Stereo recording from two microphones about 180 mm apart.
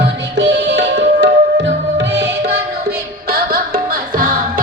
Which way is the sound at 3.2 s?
55° right (ahead or behind).